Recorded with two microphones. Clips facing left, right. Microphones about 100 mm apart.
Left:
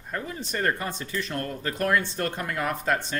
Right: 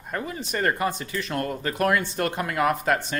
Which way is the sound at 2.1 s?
90° right.